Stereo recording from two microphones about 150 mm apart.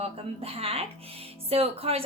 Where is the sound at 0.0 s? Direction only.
40° right (ahead or behind).